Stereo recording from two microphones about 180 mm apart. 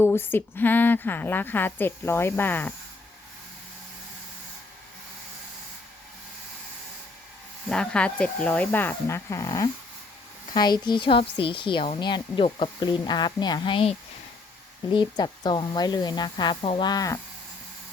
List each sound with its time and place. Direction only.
0.0 s a woman's voice: 10° left (ahead or behind)
7.7 s a woman's voice: 5° left (ahead or behind); by 13.9 s 30° left (ahead or behind)
14.9 s a woman's voice: 25° left (ahead or behind)